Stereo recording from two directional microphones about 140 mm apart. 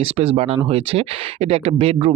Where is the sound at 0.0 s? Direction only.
45° right (ahead or behind).